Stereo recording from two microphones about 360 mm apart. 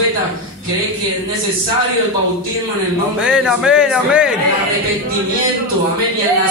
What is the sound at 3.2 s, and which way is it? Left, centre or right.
A man's voice, centre.